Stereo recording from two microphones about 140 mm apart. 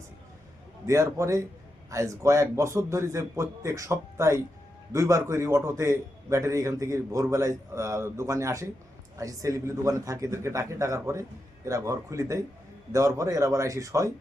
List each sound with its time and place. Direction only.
0.9 s a man's voice: 20° right (ahead or behind)